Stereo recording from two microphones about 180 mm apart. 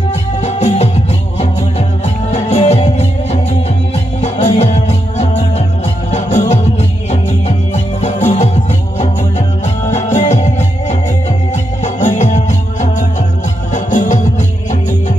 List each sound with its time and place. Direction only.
0.4 s music: 40° left (ahead or behind)
9.8 s music: 40° left (ahead or behind)